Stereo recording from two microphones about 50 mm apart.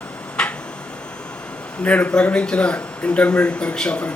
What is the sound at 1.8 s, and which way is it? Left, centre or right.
Speech, left.